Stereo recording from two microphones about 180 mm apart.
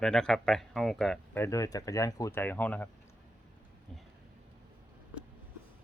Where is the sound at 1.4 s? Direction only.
15° left (ahead or behind).